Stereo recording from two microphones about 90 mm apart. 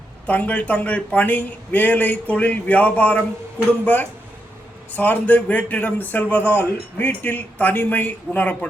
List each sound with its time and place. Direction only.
0.3 s a man's voice: 15° left (ahead or behind)
4.9 s speech: 20° left (ahead or behind)